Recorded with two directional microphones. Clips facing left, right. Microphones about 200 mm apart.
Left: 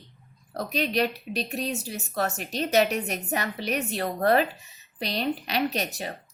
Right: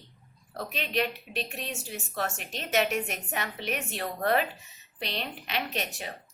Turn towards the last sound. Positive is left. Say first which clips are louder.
# left 6 dB
turn(degrees=40)  # may be behind; listen again after turning